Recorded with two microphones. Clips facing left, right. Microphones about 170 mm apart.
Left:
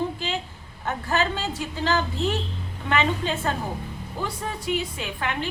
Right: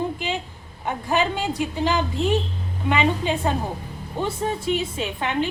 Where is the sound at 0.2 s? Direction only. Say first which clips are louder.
Right 2 dB; 15° right (ahead or behind).